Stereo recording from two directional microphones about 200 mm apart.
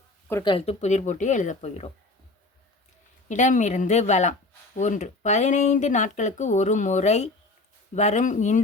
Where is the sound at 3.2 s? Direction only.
35° left (ahead or behind).